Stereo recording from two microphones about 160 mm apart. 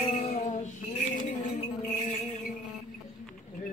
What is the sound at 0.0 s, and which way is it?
Music, 40° left (ahead or behind).